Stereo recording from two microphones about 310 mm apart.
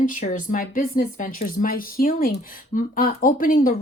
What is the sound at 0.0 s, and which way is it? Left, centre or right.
Speech, left.